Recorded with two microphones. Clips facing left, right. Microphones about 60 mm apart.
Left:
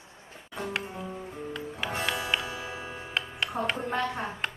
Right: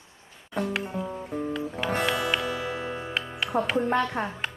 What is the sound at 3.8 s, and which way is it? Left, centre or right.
Speech, right.